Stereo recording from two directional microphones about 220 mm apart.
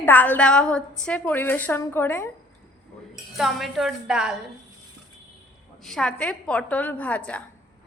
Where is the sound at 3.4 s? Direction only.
Centre (ahead or behind).